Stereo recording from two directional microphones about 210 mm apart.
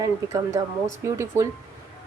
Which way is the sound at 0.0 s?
15° right (ahead or behind).